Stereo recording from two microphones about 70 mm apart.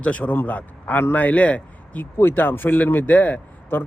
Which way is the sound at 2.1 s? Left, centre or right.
Left.